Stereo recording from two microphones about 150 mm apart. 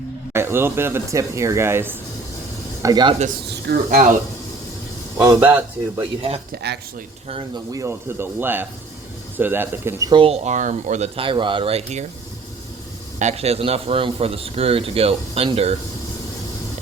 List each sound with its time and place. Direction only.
0.3 s speech: 15° right (ahead or behind)
2.8 s speech: 30° right (ahead or behind)
3.2 s speech: 75° right (ahead or behind)
5.2 s speech: 15° right (ahead or behind)
6.5 s speech: 90° right
7.5 s speech: 25° right (ahead or behind)
10.1 s speech: 35° right (ahead or behind); by 11.1 s 50° right (ahead or behind)
11.2 s a man's voice: 35° right (ahead or behind)
13.1 s a man's voice: 45° right (ahead or behind)